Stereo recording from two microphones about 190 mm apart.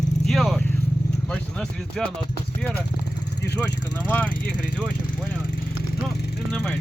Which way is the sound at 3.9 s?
10° left (ahead or behind).